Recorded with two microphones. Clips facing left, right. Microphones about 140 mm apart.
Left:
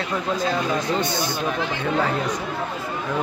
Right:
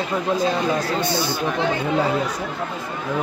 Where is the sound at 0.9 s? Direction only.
20° left (ahead or behind).